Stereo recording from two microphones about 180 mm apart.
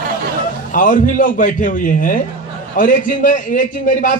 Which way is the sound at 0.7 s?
45° left (ahead or behind).